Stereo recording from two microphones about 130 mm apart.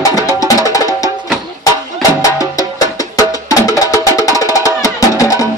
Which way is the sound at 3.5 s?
25° left (ahead or behind).